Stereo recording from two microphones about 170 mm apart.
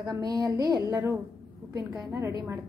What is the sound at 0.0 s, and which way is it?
A woman's voice, 20° right (ahead or behind).